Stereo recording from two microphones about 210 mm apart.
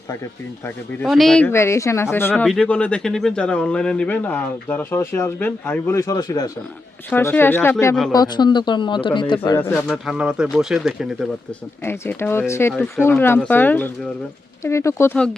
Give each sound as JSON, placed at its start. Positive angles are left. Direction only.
{"t": 1.0, "sound": "speech", "side_deg": 0}
{"t": 9.8, "sound": "speech", "side_deg": -5}
{"t": 11.8, "sound": "speech", "side_deg": 10}